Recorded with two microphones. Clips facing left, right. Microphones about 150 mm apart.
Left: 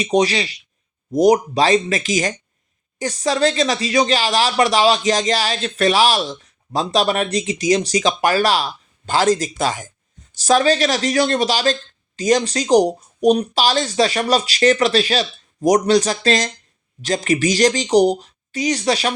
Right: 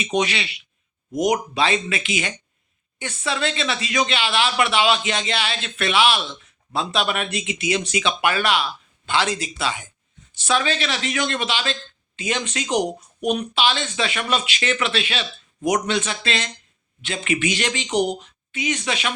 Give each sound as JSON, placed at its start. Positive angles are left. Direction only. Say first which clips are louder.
{"t": 0.0, "sound": "speech", "louder": "left 6 dB", "side_deg": 35}